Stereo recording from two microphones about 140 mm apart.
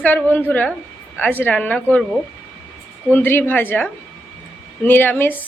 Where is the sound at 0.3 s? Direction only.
15° left (ahead or behind).